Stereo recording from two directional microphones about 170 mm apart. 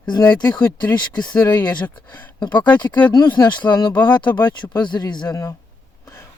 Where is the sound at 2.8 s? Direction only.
25° left (ahead or behind).